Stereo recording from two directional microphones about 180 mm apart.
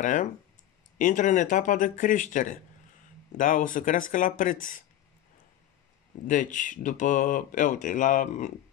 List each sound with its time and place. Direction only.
0.0 s speech: 45° left (ahead or behind)
6.2 s speech: 45° left (ahead or behind)